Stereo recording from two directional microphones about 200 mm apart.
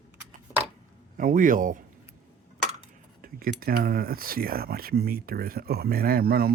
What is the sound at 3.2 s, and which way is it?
Speech, 45° right (ahead or behind).